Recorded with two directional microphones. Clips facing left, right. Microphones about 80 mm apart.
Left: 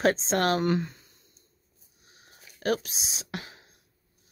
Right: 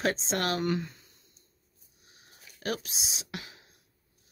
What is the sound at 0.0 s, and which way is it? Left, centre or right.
Speech, left.